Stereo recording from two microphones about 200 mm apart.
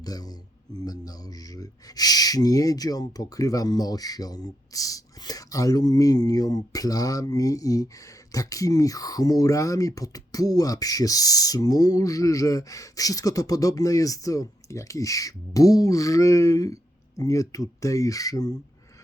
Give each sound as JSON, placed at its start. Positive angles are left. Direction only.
{"t": 0.0, "sound": "speech", "side_deg": 20}